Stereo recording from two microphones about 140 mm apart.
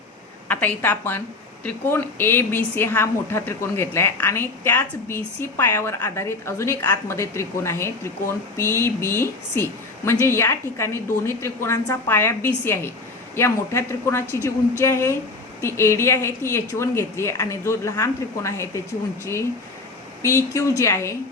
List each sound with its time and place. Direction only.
0.4 s a woman's voice: 15° left (ahead or behind)